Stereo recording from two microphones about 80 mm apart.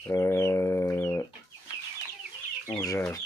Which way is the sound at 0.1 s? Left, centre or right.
Left.